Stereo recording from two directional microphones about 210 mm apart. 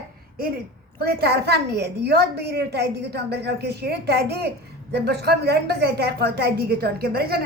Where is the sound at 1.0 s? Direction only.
50° right (ahead or behind).